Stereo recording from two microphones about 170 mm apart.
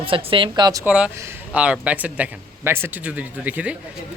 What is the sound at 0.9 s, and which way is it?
A man's voice, 5° right (ahead or behind).